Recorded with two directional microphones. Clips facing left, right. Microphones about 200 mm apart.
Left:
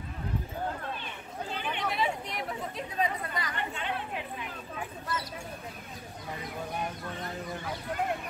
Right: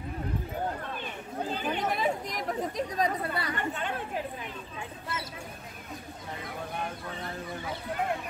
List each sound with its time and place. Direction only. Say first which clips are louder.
1.5 s chatter: right 3 dB; 40° right (ahead or behind)
3.5 s chatter: right 2 dB; 45° right (ahead or behind)